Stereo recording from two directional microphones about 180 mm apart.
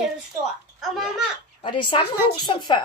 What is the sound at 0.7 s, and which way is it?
Speech, centre (ahead or behind).